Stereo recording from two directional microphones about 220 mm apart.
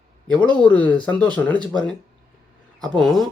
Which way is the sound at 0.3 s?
5° left (ahead or behind).